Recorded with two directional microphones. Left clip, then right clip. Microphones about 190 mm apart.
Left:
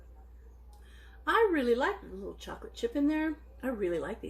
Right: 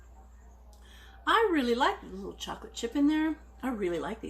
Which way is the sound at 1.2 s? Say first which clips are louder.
Right 1 dB; 15° right (ahead or behind).